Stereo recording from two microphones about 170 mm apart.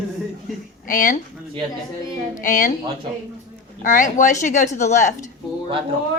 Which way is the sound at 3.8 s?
50° left (ahead or behind).